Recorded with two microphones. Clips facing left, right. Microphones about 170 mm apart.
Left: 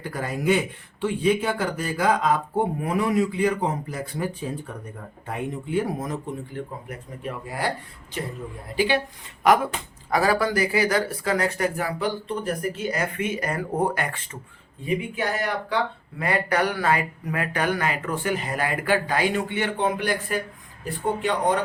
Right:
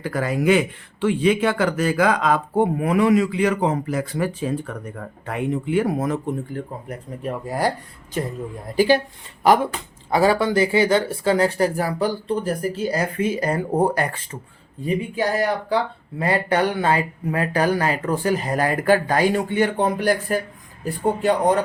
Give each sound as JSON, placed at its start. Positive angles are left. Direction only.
{"t": 0.0, "sound": "speech", "side_deg": -90}
{"t": 6.5, "sound": "speech", "side_deg": -40}
{"t": 10.1, "sound": "speech", "side_deg": -25}